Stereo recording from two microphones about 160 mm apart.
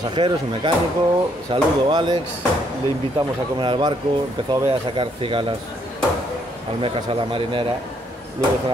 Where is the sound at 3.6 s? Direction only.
30° right (ahead or behind).